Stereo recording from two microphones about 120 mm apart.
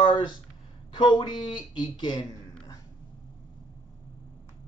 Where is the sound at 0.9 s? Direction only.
40° left (ahead or behind).